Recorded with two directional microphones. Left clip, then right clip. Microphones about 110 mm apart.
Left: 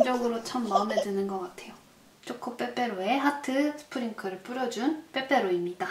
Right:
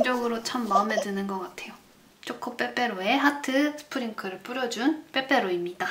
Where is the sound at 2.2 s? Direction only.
20° right (ahead or behind).